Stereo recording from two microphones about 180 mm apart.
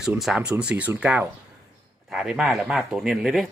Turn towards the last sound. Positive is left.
turn(degrees=0)  # may be behind; listen again after turning